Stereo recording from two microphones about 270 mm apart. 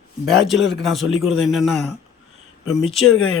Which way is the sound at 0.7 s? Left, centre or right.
Centre.